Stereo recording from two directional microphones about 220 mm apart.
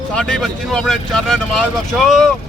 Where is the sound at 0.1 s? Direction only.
5° left (ahead or behind).